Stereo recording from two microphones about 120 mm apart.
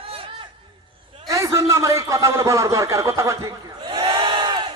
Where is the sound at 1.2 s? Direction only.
25° right (ahead or behind).